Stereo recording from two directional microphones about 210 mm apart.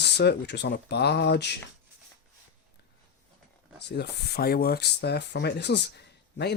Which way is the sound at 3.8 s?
50° left (ahead or behind).